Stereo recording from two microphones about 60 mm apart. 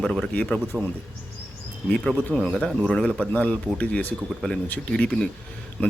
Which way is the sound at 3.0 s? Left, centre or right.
Centre.